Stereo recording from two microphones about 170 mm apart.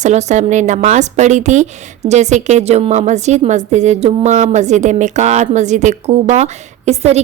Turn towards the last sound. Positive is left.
turn(degrees=-40)  # may be behind; listen again after turning